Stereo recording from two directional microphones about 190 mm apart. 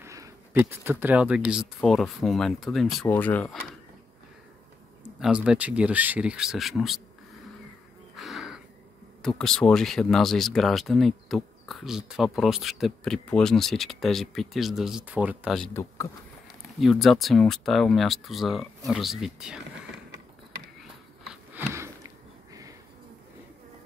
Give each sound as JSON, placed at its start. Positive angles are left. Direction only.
{"t": 0.0, "sound": "speech", "side_deg": -15}
{"t": 5.2, "sound": "speech", "side_deg": -5}
{"t": 8.2, "sound": "crow", "side_deg": 0}
{"t": 9.4, "sound": "speech", "side_deg": 5}
{"t": 16.8, "sound": "speech", "side_deg": 0}
{"t": 21.3, "sound": "a sound", "side_deg": -15}